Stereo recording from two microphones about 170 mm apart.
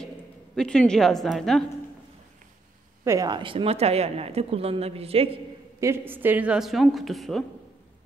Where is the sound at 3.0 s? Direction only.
20° right (ahead or behind).